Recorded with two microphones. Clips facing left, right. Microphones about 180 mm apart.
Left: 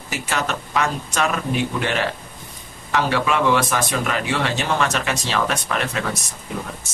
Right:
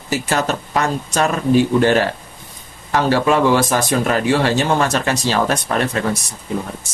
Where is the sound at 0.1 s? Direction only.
35° right (ahead or behind).